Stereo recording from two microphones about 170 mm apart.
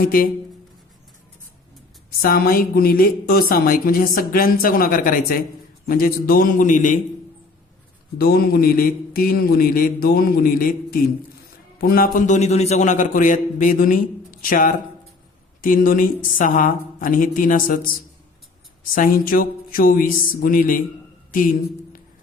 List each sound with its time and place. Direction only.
0.0 s a woman's voice: 55° left (ahead or behind)
2.0 s a woman's voice: 60° left (ahead or behind)
8.2 s a woman's voice: 60° left (ahead or behind)
18.9 s a woman's voice: 55° left (ahead or behind)